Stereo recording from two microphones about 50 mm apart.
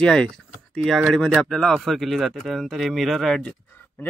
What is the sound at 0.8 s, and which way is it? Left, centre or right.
Speech, centre.